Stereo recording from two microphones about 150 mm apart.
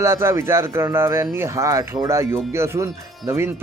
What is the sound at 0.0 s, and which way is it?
A man's voice, 15° right (ahead or behind).